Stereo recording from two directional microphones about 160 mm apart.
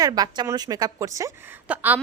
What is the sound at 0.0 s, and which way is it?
Speech, 25° right (ahead or behind).